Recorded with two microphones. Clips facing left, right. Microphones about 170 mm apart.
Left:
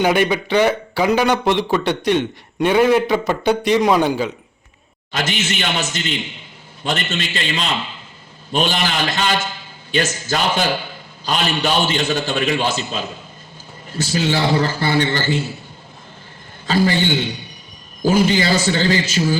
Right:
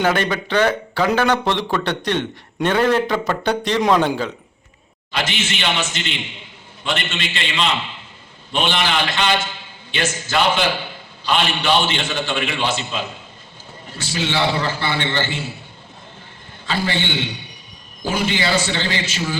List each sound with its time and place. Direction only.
0.0 s a man's voice: 15° left (ahead or behind)
5.1 s a man's voice: 45° left (ahead or behind)
16.6 s a man's voice: 40° left (ahead or behind)